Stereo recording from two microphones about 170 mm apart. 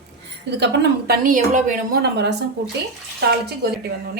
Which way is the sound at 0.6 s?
75° right (ahead or behind).